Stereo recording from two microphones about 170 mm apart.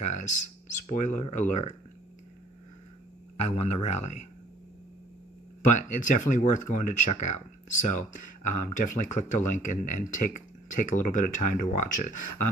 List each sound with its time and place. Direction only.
0.0 s a sound: 45° left (ahead or behind)
0.9 s speech: 45° left (ahead or behind)
3.3 s speech: 40° left (ahead or behind)
5.7 s speech: 45° left (ahead or behind)